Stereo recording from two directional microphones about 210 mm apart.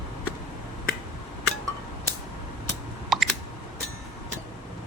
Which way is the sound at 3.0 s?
Centre (ahead or behind).